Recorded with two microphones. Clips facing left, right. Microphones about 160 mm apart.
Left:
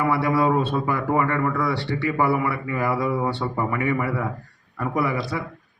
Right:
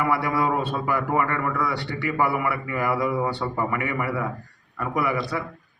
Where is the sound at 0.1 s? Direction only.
30° left (ahead or behind).